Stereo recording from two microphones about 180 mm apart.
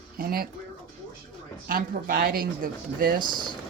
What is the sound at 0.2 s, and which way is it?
Speech, 55° right (ahead or behind).